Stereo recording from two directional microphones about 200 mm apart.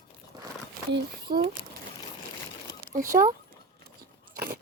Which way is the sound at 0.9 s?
50° right (ahead or behind).